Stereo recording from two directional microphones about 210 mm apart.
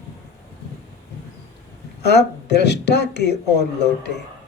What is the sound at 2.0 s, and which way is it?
Speech, 55° left (ahead or behind).